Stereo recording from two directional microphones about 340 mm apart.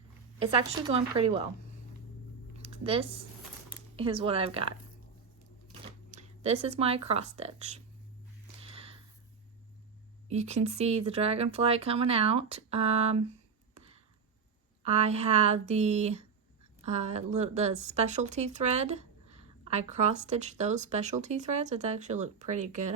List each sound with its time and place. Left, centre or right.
0.3 s speech: centre
3.9 s speech: centre
5.8 s speech: centre
8.6 s a sound: centre
10.2 s speech: centre
14.8 s speech: centre